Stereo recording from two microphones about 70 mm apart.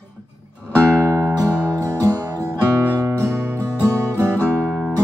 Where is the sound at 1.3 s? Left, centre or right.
Right.